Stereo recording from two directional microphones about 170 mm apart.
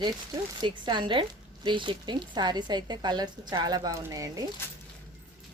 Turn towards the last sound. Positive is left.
turn(degrees=15)  # may be behind; listen again after turning